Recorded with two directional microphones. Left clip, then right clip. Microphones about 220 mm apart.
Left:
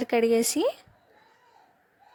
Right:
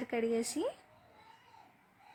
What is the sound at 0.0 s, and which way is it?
Speech, 40° left (ahead or behind).